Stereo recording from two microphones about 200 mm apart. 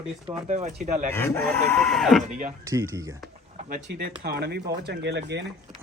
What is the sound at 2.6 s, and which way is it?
Speech, 15° right (ahead or behind).